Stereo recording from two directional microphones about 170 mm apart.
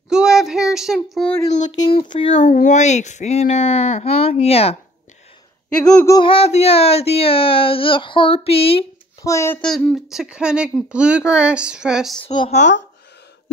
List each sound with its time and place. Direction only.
0.1 s child singing: 5° right (ahead or behind)
1.1 s speech: 5° left (ahead or behind)
1.6 s speech: 25° left (ahead or behind)
2.4 s speech: 50° left (ahead or behind)
6.0 s speech: 30° left (ahead or behind)
9.2 s a child's voice: 15° left (ahead or behind)
9.6 s speech: 5° left (ahead or behind)
12.4 s speech: 45° left (ahead or behind)